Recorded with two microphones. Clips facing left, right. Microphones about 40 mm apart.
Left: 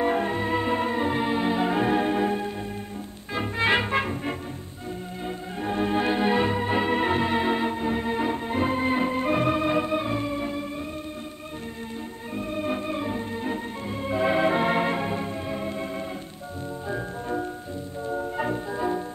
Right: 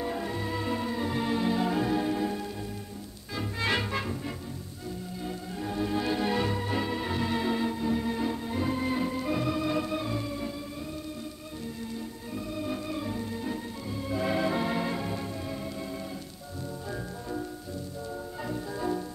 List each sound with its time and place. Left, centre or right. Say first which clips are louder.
0.0 s music: left 8 dB; left
5.2 s organ: left 5 dB; left
12.4 s organ: left 6 dB; left
16.9 s music: left 8 dB; left